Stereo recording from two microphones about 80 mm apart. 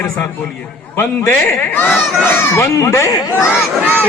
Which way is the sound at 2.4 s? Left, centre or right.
Left.